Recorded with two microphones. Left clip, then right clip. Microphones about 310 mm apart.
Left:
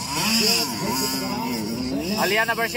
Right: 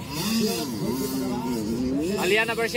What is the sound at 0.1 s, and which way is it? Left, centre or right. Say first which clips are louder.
Vehicle: left 6 dB; centre.